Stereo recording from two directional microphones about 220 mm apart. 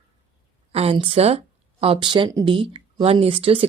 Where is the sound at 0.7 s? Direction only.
25° right (ahead or behind).